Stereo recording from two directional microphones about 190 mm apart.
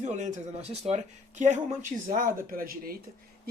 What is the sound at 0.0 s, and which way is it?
Speech, 40° right (ahead or behind).